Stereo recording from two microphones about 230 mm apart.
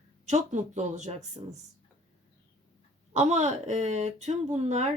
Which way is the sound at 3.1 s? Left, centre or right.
Right.